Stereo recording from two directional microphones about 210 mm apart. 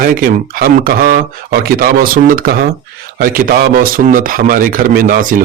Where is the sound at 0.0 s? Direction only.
40° right (ahead or behind).